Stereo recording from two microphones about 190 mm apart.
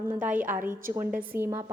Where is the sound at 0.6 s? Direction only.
45° right (ahead or behind).